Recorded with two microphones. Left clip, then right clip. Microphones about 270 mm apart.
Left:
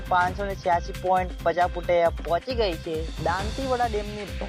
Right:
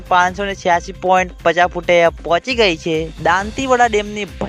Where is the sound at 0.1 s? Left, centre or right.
Right.